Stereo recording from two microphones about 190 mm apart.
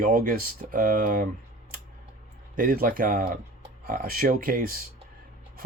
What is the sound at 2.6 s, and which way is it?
Speech, 45° right (ahead or behind).